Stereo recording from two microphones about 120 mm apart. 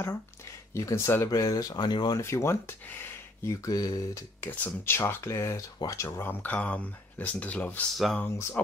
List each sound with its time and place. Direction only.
0.7 s speech: 25° left (ahead or behind)
2.1 s speech: 25° left (ahead or behind)
4.4 s speech: 20° left (ahead or behind)